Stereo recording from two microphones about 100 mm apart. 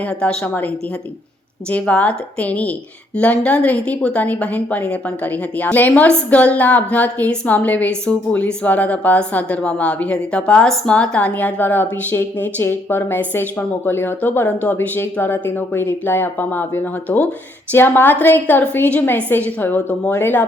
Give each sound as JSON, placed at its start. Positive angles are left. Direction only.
{"t": 0.0, "sound": "a woman's voice", "side_deg": 10}
{"t": 1.7, "sound": "a woman's voice", "side_deg": 10}